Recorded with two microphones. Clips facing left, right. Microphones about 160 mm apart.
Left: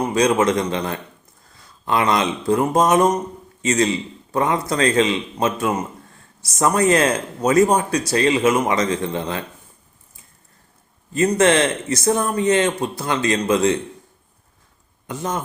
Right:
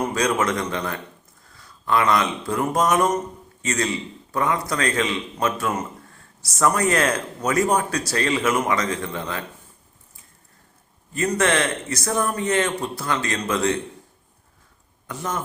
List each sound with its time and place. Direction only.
0.0 s a man's voice: 20° left (ahead or behind)
11.1 s speech: 25° left (ahead or behind)
15.0 s speech: 20° left (ahead or behind)